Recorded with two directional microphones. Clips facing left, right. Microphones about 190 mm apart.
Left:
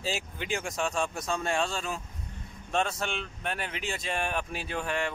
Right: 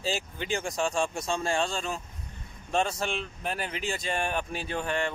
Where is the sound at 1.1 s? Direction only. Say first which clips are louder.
Right 1 dB; 25° right (ahead or behind).